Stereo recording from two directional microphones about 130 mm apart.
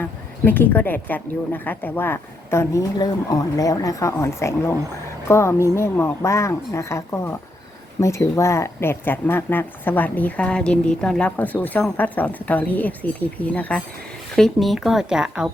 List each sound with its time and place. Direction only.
0.0 s speech: 15° left (ahead or behind); by 15.5 s 5° right (ahead or behind)